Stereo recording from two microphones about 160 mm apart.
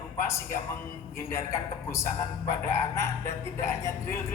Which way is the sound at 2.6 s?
20° left (ahead or behind).